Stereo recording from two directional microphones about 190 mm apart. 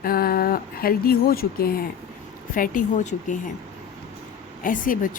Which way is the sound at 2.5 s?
40° left (ahead or behind).